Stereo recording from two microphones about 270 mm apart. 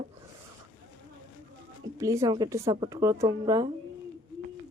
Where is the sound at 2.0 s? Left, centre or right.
Centre.